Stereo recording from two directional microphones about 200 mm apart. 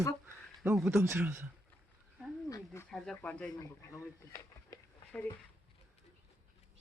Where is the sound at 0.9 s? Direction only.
15° right (ahead or behind).